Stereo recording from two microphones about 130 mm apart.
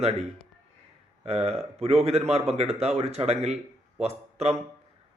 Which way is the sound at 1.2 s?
55° right (ahead or behind).